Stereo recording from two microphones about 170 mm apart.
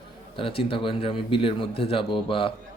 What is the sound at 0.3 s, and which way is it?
A man's voice, 30° left (ahead or behind).